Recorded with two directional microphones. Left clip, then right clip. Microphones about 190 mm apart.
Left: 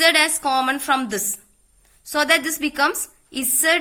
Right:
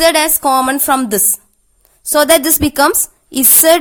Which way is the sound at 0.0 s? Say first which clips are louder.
Right 5 dB; 45° right (ahead or behind).